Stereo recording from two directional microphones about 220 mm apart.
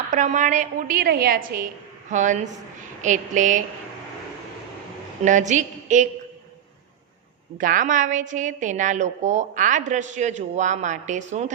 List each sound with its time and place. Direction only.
0.1 s a woman's voice: 35° right (ahead or behind)
5.2 s a woman's voice: 35° right (ahead or behind)
7.6 s a woman's voice: 40° right (ahead or behind)